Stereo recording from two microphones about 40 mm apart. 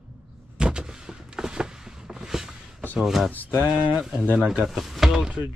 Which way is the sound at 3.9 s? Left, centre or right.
Centre.